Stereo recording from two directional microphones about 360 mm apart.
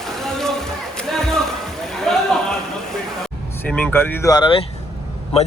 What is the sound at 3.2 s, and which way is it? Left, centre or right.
Vehicle, centre.